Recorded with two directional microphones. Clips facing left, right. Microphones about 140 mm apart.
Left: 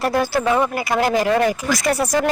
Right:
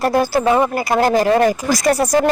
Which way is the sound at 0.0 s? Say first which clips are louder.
Right 3 dB; 40° right (ahead or behind).